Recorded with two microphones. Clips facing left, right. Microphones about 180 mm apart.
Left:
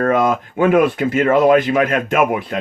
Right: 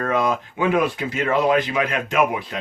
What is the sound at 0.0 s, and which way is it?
Speech, 50° left (ahead or behind).